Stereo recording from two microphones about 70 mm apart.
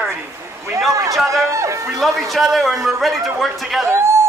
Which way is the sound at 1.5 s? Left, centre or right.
Right.